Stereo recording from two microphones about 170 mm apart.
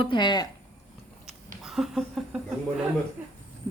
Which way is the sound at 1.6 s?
Centre (ahead or behind).